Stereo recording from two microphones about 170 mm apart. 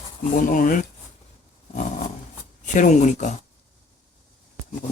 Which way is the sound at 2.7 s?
45° left (ahead or behind).